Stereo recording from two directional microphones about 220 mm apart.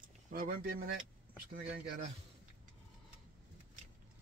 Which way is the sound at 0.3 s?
40° right (ahead or behind).